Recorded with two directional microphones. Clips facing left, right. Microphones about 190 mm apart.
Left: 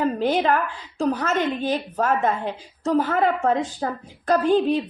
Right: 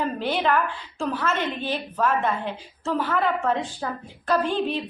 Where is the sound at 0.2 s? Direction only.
40° left (ahead or behind).